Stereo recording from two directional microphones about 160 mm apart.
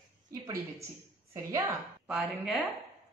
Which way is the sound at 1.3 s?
20° right (ahead or behind).